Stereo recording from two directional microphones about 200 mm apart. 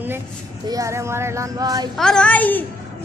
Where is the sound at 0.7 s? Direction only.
15° right (ahead or behind).